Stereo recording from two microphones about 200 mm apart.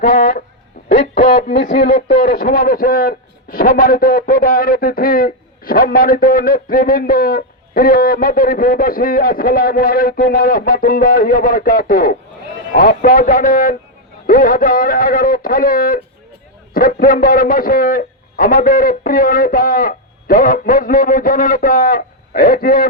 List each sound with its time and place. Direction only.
0.0 s a man's voice: 50° left (ahead or behind)